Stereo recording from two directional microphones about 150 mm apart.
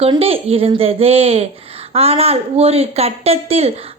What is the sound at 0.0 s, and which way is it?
A woman's voice, 40° right (ahead or behind).